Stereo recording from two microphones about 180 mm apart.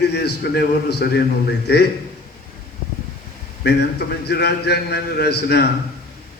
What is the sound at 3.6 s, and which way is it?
A man's voice, 65° left (ahead or behind).